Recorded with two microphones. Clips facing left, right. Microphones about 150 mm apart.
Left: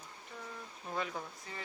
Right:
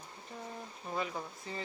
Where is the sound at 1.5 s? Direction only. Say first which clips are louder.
Right 5 dB; 30° right (ahead or behind).